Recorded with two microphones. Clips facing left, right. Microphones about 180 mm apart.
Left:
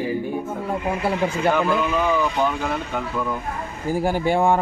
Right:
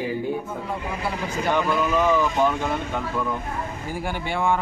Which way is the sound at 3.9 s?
40° left (ahead or behind).